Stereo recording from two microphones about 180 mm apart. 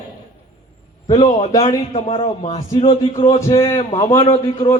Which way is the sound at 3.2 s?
15° left (ahead or behind).